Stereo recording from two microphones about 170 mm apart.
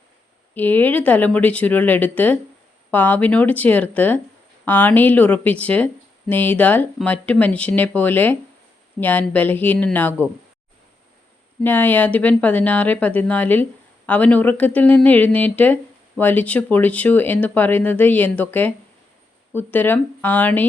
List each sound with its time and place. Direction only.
0.5 s speech: 10° left (ahead or behind)
11.6 s speech: 10° left (ahead or behind)